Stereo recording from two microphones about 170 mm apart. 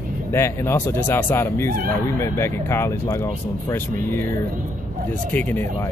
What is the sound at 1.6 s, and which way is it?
Speech, 60° right (ahead or behind).